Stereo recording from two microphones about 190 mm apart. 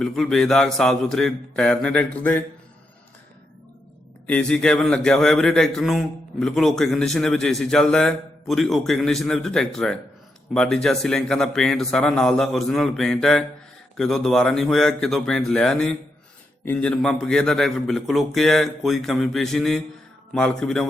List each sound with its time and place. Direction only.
0.0 s a man's voice: centre (ahead or behind)
4.3 s a man's voice: 5° left (ahead or behind)